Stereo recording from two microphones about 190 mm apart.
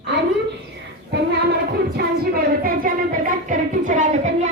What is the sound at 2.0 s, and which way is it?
Music, 55° right (ahead or behind).